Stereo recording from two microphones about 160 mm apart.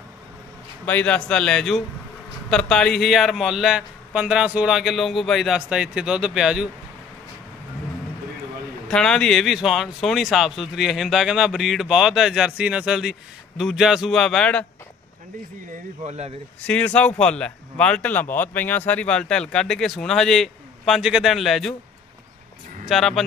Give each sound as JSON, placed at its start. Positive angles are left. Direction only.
{"t": 0.8, "sound": "speech", "side_deg": 10}
{"t": 8.8, "sound": "speech", "side_deg": 5}
{"t": 16.0, "sound": "speech", "side_deg": -40}
{"t": 16.6, "sound": "speech", "side_deg": 10}
{"t": 22.8, "sound": "speech", "side_deg": 0}